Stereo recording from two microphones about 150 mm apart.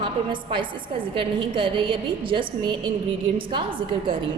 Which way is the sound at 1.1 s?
35° right (ahead or behind).